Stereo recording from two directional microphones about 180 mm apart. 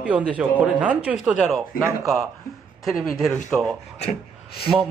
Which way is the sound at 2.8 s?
Centre (ahead or behind).